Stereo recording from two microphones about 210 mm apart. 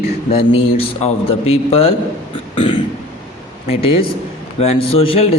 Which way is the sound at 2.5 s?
25° left (ahead or behind).